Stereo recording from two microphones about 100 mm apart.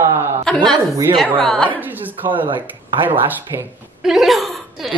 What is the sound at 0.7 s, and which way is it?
Speech, 30° right (ahead or behind).